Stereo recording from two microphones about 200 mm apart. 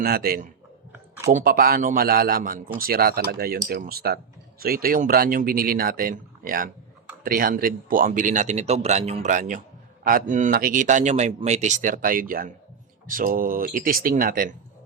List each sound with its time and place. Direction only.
0.0 s a man's voice: 50° right (ahead or behind)